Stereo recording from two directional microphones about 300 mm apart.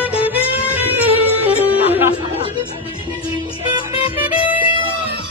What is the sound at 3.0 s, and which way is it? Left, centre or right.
Music, centre.